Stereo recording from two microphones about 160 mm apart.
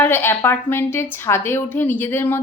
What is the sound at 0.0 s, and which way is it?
Speech, 15° left (ahead or behind).